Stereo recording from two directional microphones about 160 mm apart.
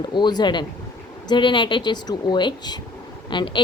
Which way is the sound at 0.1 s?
25° left (ahead or behind).